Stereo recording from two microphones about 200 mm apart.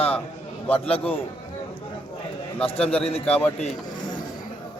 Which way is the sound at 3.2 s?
5° left (ahead or behind).